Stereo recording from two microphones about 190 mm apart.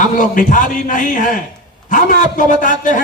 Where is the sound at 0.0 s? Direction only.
45° left (ahead or behind).